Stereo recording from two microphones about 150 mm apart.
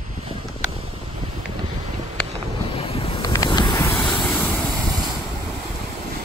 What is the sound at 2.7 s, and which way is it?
Vehicle, 35° left (ahead or behind).